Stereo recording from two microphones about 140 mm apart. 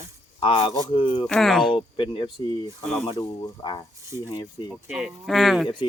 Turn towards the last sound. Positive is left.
turn(degrees=0)  # may be behind; listen again after turning